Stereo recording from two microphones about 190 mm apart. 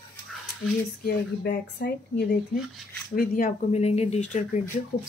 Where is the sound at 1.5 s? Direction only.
55° left (ahead or behind).